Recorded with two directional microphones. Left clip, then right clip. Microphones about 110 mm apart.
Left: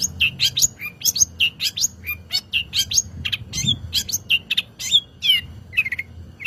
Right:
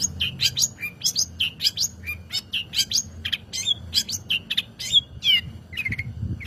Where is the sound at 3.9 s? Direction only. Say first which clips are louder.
Left 4 dB; 40° left (ahead or behind).